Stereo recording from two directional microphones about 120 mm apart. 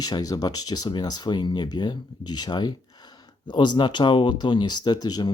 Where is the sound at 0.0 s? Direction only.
35° left (ahead or behind).